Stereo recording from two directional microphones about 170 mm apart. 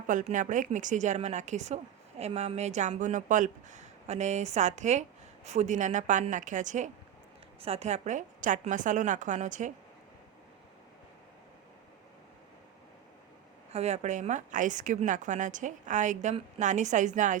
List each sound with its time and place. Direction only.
0.1 s speech: 45° right (ahead or behind)
13.7 s speech: 40° right (ahead or behind)